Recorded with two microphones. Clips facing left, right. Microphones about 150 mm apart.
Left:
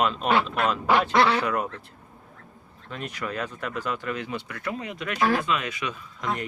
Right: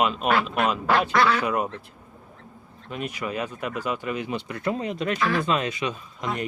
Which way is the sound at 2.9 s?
15° right (ahead or behind).